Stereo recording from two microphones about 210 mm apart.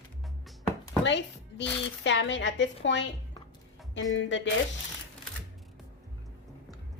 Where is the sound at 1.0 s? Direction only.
55° left (ahead or behind).